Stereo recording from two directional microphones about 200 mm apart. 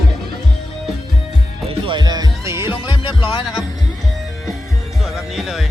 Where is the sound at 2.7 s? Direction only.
25° left (ahead or behind).